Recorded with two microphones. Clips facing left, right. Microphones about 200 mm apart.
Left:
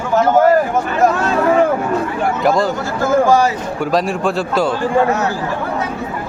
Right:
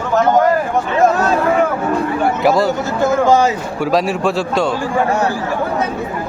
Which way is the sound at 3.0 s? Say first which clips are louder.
Even; 20° right (ahead or behind).